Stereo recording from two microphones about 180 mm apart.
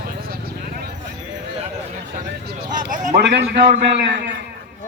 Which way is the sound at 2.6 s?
45° right (ahead or behind).